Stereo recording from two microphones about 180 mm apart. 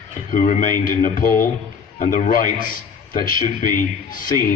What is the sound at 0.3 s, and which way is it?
A man's voice, 50° left (ahead or behind).